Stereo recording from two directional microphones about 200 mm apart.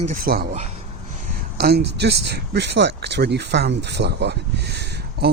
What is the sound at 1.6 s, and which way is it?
Speech, 55° right (ahead or behind).